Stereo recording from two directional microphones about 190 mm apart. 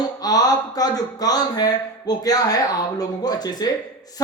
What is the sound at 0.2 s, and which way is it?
A man's voice, 20° left (ahead or behind).